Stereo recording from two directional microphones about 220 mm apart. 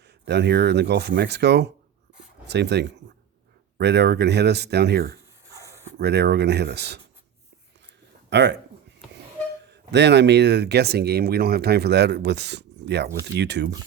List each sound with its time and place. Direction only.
0.3 s speech: 50° right (ahead or behind)
8.3 s speech: 50° right (ahead or behind)
9.6 s speech: 50° right (ahead or behind)